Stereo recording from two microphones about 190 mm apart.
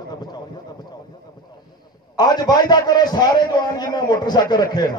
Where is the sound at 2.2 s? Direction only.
20° left (ahead or behind).